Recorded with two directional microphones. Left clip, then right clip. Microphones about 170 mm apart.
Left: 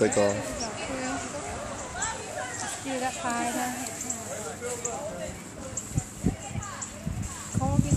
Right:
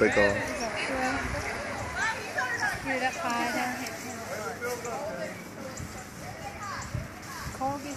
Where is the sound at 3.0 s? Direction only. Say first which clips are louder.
Left 1 dB; 35° left (ahead or behind).